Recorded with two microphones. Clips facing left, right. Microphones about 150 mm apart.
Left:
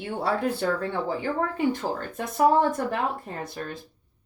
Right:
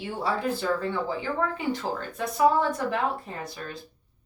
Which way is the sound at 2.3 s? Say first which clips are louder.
Left 2 dB; 50° left (ahead or behind).